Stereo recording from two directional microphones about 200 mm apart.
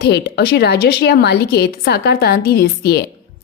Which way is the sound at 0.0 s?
55° left (ahead or behind).